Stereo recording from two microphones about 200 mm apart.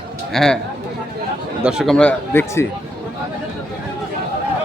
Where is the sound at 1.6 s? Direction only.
Centre (ahead or behind).